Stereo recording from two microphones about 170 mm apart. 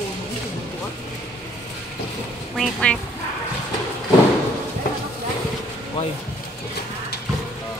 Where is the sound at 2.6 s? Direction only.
5° left (ahead or behind).